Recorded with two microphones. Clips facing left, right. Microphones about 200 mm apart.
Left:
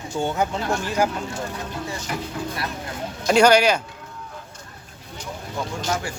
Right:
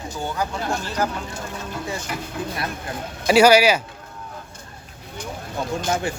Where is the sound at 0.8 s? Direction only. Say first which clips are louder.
Left 4 dB; 10° left (ahead or behind).